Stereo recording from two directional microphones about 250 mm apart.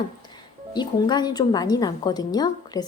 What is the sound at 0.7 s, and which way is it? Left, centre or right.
A woman's voice, centre.